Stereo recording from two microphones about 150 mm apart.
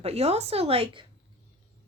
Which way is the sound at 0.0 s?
45° right (ahead or behind).